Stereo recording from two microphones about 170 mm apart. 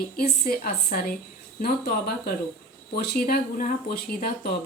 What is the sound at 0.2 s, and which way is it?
Speech, 65° left (ahead or behind).